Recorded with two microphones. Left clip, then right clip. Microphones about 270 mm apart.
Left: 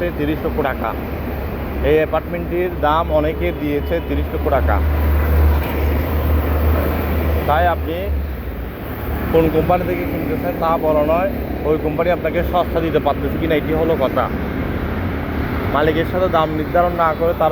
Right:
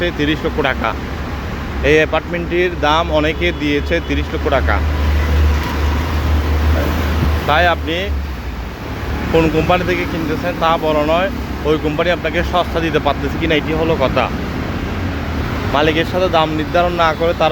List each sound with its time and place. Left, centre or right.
0.0 s speech: right
7.4 s speech: right
9.3 s speech: right
15.7 s speech: centre
17.0 s speech: right